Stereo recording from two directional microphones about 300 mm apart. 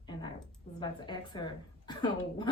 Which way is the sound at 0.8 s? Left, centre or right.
Centre.